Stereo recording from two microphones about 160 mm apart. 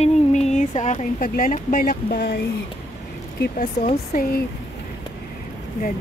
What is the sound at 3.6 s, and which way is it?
Speech, 50° left (ahead or behind).